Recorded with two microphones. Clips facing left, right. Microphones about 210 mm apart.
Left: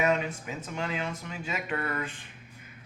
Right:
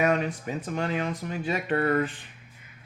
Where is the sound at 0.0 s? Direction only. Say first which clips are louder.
Right 3 dB; 35° right (ahead or behind).